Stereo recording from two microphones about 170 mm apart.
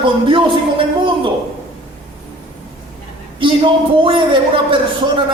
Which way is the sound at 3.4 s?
30° right (ahead or behind).